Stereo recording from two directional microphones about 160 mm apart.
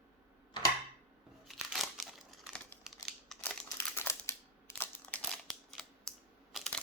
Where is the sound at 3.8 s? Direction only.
15° left (ahead or behind).